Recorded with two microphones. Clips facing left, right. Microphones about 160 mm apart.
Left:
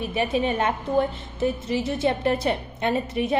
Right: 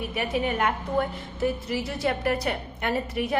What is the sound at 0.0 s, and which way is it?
A woman's voice, 25° left (ahead or behind).